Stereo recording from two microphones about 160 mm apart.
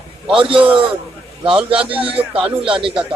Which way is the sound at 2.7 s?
30° right (ahead or behind).